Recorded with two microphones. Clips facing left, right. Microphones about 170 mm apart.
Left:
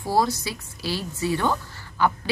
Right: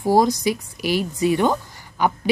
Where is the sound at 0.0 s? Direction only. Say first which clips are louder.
Right 6 dB; 15° right (ahead or behind).